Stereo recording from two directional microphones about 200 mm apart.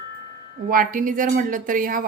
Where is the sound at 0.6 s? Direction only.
45° right (ahead or behind).